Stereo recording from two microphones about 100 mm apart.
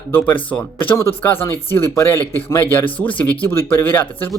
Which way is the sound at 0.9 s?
25° left (ahead or behind).